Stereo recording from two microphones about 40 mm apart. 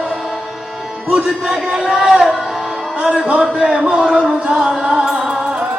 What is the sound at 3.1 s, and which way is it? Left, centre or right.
A man's voice, centre.